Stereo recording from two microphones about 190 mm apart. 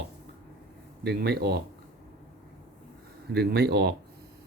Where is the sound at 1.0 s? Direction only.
60° right (ahead or behind).